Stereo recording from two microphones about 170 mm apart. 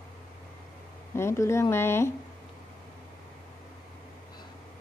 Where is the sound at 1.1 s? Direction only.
15° left (ahead or behind).